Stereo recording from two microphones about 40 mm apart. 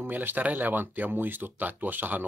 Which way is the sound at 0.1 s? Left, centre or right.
Right.